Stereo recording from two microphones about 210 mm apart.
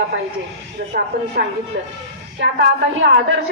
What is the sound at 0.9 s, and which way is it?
A woman's voice, 45° right (ahead or behind).